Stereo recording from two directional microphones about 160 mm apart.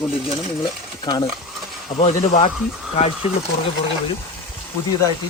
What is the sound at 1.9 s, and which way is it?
Speech, 40° left (ahead or behind).